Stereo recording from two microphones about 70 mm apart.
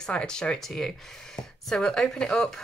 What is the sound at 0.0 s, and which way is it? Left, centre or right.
Speech, centre.